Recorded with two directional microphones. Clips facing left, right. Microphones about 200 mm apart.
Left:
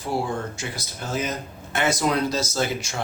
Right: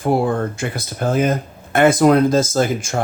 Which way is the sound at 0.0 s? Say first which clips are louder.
Right 9 dB; 55° right (ahead or behind).